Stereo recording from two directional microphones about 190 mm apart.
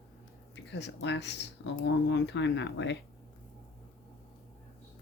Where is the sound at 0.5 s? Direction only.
65° left (ahead or behind).